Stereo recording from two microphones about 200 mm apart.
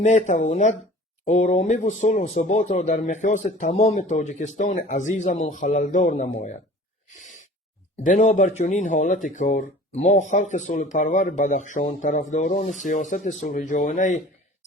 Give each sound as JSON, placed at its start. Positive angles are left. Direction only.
{"t": 0.0, "sound": "speech", "side_deg": 35}
{"t": 7.2, "sound": "owl", "side_deg": 40}
{"t": 7.9, "sound": "speech", "side_deg": 40}